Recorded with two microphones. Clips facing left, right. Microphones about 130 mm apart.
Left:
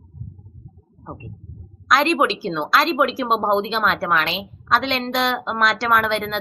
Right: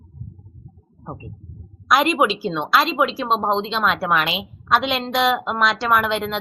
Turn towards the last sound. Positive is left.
turn(degrees=0)  # may be behind; listen again after turning